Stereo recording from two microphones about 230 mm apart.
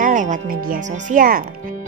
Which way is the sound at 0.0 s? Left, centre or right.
Right.